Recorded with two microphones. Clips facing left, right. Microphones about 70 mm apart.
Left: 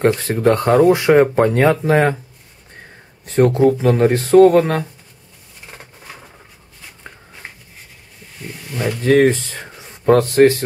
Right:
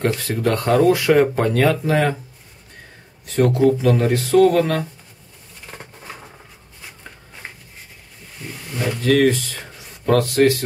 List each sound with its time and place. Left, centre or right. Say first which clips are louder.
0.0 s speech: left 5 dB; left
3.3 s speech: left 3 dB; left
9.0 s speech: left 3 dB; left